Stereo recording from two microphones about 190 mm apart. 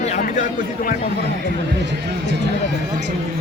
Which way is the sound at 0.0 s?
40° left (ahead or behind).